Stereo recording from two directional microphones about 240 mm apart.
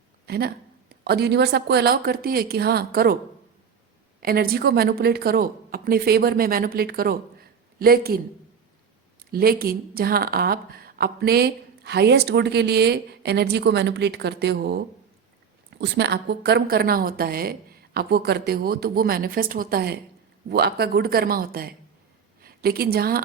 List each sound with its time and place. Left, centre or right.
0.3 s a woman's voice: right
4.2 s a woman's voice: right
9.3 s a woman's voice: right
15.8 s a woman's voice: right